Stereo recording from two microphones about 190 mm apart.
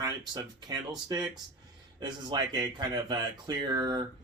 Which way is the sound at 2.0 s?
20° right (ahead or behind).